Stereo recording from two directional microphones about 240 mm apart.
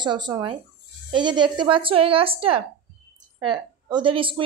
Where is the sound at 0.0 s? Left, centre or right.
Centre.